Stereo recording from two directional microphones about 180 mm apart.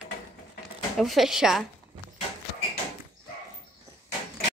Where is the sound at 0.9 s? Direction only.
Centre (ahead or behind).